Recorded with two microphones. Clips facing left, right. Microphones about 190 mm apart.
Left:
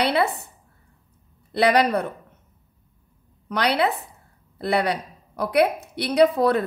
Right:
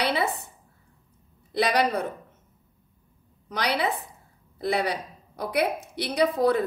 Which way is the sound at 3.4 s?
65° left (ahead or behind).